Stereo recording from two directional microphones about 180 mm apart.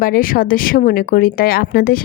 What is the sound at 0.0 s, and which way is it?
A woman's voice, 50° left (ahead or behind).